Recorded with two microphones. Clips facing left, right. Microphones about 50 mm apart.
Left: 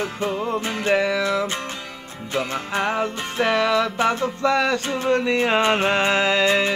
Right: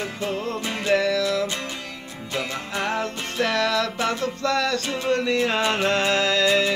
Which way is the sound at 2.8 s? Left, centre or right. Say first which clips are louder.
Left 2 dB; centre.